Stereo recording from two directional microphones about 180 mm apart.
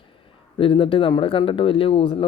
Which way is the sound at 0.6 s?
30° left (ahead or behind).